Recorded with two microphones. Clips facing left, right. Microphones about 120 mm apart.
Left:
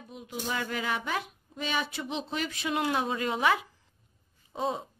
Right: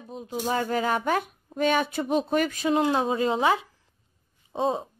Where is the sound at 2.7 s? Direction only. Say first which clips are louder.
Right 5 dB; 30° right (ahead or behind).